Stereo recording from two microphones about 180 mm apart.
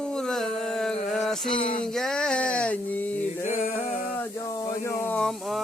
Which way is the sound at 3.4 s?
40° left (ahead or behind).